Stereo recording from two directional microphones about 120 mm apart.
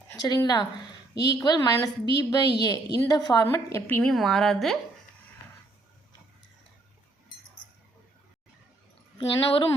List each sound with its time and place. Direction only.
0.1 s a woman's voice: 30° left (ahead or behind)
4.1 s a woman's voice: centre (ahead or behind)
9.1 s a woman's voice: 45° left (ahead or behind)